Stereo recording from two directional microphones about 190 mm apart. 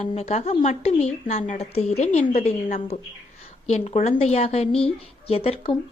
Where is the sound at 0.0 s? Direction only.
35° left (ahead or behind).